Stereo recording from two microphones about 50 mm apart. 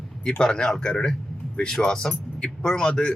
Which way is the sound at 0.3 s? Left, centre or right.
Centre.